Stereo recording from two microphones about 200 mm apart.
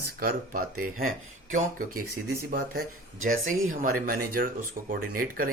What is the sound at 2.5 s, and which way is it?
Speech, 50° right (ahead or behind).